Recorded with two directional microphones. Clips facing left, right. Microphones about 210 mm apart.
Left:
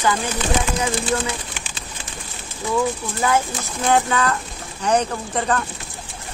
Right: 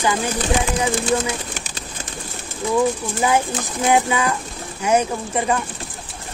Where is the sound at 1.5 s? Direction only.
40° right (ahead or behind).